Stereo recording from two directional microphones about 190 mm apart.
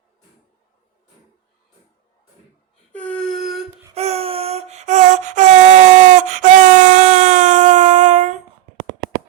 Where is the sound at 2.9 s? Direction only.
5° left (ahead or behind).